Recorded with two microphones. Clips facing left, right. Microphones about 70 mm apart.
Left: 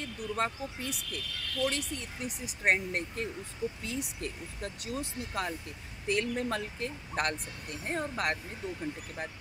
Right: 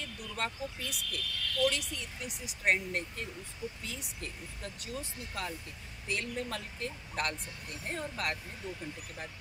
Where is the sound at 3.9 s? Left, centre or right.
Left.